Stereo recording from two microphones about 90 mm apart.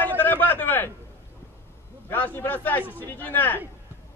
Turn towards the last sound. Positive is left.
turn(degrees=20)  # may be behind; listen again after turning